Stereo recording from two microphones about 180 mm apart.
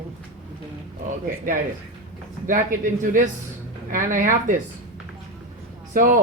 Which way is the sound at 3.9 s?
45° right (ahead or behind).